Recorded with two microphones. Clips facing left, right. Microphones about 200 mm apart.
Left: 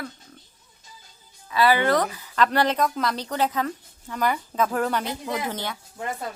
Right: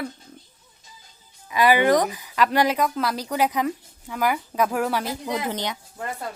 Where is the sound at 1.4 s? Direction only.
15° right (ahead or behind).